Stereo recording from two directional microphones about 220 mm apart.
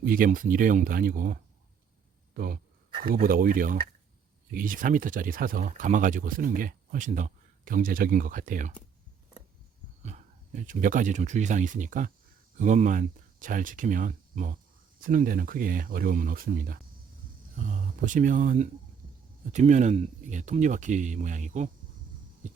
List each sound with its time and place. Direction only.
0.0 s speech: 40° right (ahead or behind)
10.0 s speech: 30° right (ahead or behind)